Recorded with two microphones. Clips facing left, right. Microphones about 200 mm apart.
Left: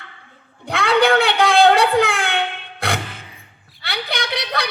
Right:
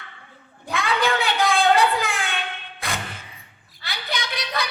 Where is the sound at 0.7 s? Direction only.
70° left (ahead or behind).